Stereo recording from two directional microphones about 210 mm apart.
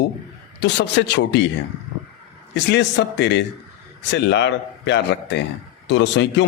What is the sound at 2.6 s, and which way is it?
A man's voice, 55° left (ahead or behind).